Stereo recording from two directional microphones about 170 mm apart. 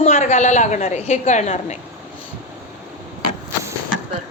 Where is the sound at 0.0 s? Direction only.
40° left (ahead or behind).